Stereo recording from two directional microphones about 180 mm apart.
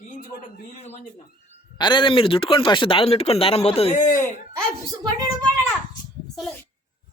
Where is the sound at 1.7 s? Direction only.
25° left (ahead or behind).